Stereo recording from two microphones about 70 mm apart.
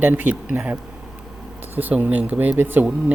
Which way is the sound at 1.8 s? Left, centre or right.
Right.